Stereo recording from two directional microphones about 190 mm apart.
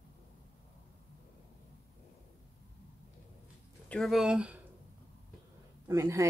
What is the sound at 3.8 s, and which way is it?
Speech, 5° left (ahead or behind).